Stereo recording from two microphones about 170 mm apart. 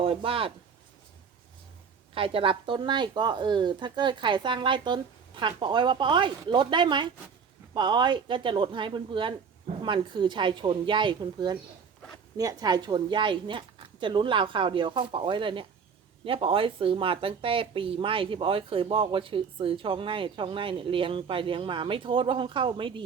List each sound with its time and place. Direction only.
0.0 s speech: 30° right (ahead or behind)
2.1 s speech: 30° right (ahead or behind)